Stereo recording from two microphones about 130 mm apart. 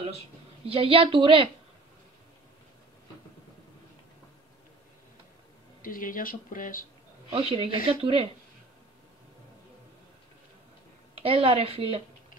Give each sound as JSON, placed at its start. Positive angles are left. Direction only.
{"t": 0.7, "sound": "a woman's voice", "side_deg": -45}
{"t": 5.8, "sound": "speech", "side_deg": 90}
{"t": 7.3, "sound": "a woman's voice", "side_deg": -50}
{"t": 11.1, "sound": "a woman's voice", "side_deg": -50}